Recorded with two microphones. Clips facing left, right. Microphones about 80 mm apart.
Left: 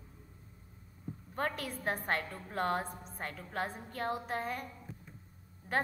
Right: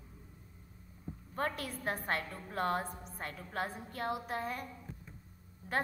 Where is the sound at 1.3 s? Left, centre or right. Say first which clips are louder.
Even; left.